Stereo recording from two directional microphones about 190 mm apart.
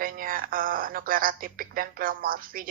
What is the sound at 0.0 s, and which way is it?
A woman's voice, 50° right (ahead or behind).